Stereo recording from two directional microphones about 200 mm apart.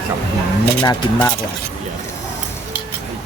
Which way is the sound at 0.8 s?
20° left (ahead or behind).